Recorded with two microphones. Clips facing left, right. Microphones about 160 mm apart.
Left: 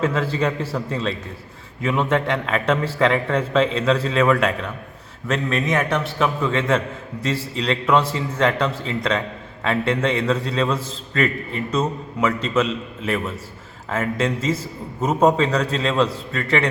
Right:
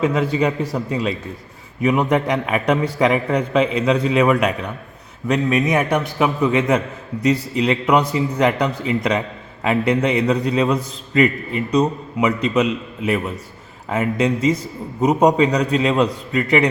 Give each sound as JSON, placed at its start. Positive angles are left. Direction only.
{"t": 0.0, "sound": "a man's voice", "side_deg": -10}